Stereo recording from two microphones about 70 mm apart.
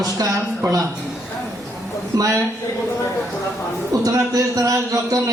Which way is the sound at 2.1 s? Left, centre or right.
Right.